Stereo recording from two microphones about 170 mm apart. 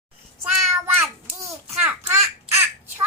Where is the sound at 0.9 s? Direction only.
20° right (ahead or behind).